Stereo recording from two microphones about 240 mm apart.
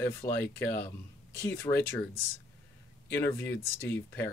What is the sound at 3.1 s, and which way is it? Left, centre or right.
Speech, centre.